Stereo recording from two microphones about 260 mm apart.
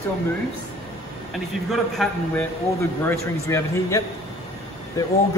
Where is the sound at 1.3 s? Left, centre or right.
Centre.